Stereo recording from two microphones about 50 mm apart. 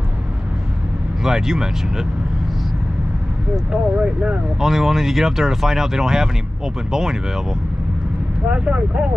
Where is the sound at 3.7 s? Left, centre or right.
Right.